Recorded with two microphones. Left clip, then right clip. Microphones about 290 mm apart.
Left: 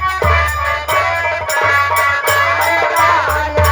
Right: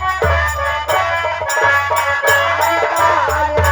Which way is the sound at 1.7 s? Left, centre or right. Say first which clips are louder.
Left 2 dB; centre.